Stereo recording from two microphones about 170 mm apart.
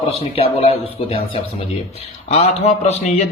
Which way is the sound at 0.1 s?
35° left (ahead or behind).